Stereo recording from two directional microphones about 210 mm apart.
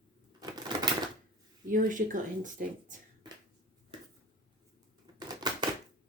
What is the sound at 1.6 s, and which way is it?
Speech, 40° right (ahead or behind).